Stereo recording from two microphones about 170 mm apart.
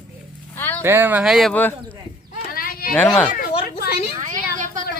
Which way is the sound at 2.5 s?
60° left (ahead or behind).